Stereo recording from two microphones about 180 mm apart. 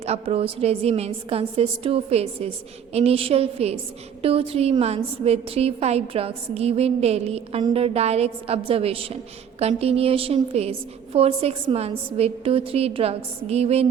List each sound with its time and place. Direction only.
0.0 s a woman's voice: 35° right (ahead or behind)